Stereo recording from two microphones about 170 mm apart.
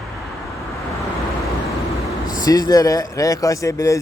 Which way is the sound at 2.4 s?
20° left (ahead or behind).